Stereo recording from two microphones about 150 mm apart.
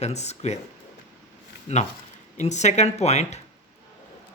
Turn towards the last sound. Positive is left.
turn(degrees=45)  # may be behind; listen again after turning